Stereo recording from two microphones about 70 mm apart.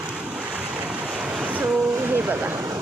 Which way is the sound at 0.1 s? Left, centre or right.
Centre.